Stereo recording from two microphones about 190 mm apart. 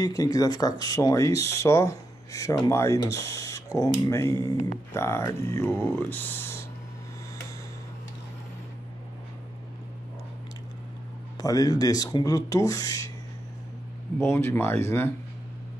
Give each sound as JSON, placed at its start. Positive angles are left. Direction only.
{"t": 0.0, "sound": "speech", "side_deg": 20}
{"t": 11.3, "sound": "speech", "side_deg": 20}
{"t": 14.3, "sound": "speech", "side_deg": 15}